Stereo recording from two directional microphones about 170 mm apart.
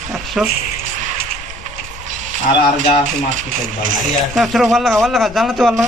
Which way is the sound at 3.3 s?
50° right (ahead or behind).